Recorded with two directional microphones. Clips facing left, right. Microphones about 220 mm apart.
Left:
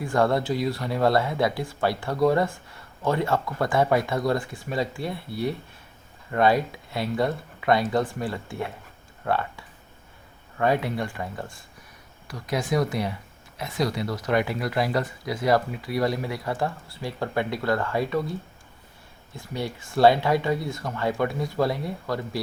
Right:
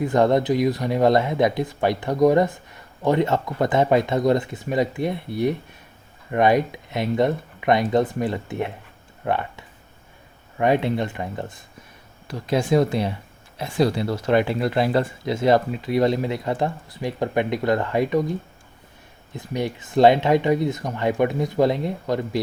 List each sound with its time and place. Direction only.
0.0 s speech: 20° right (ahead or behind)